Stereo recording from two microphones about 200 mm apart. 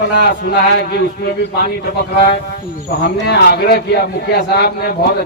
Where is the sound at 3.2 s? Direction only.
55° left (ahead or behind).